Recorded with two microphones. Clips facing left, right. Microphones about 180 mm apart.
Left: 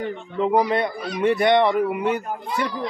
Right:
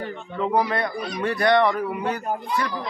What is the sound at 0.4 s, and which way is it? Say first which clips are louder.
Speech: left 3 dB; 20° left (ahead or behind).